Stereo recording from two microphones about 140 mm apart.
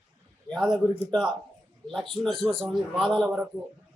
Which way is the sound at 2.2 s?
5° left (ahead or behind).